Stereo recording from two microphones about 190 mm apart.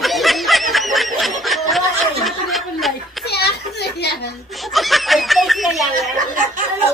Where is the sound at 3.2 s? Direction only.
60° left (ahead or behind).